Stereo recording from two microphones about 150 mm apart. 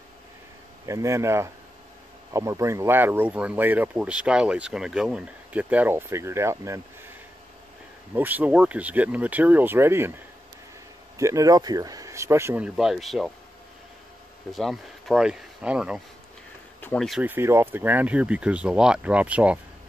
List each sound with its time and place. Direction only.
0.8 s speech: 20° right (ahead or behind)
8.1 s speech: 10° right (ahead or behind)
11.1 s speech: 20° right (ahead or behind); by 13.3 s centre (ahead or behind)
14.5 s speech: centre (ahead or behind)
16.8 s speech: 5° left (ahead or behind)
17.2 s speech: 15° right (ahead or behind)